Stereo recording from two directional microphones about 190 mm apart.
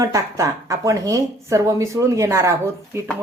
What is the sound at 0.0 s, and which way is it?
Speech, 15° right (ahead or behind).